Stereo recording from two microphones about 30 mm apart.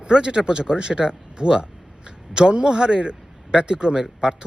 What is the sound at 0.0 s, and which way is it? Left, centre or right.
A man's voice, right.